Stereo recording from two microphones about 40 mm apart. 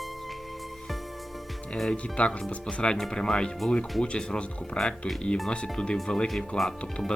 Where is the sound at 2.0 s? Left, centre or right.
Left.